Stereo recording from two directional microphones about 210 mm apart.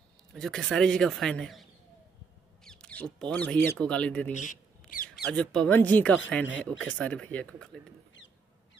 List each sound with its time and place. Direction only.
0.3 s a man's voice: centre (ahead or behind)
4.3 s squawk: 35° left (ahead or behind)
5.3 s a man's voice: 5° left (ahead or behind)